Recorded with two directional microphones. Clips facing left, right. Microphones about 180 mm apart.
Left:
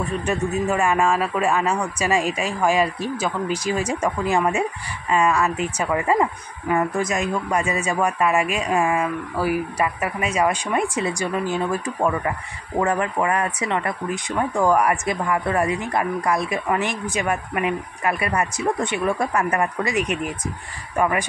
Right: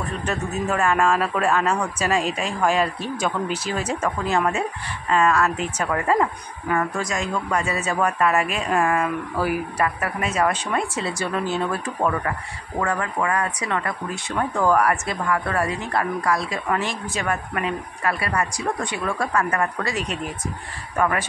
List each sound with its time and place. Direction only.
0.2 s speech: 10° left (ahead or behind)
12.7 s speech: 20° left (ahead or behind)